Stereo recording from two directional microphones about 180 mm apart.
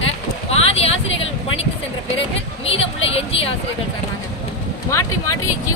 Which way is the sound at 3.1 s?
35° left (ahead or behind).